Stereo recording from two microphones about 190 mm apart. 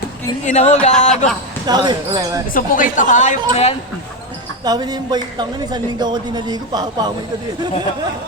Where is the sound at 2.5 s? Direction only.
45° left (ahead or behind).